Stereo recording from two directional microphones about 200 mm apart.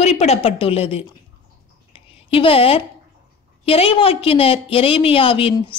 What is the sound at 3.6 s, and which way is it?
A woman's voice, 30° left (ahead or behind).